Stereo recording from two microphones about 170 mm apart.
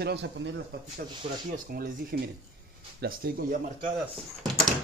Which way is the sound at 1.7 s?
60° right (ahead or behind).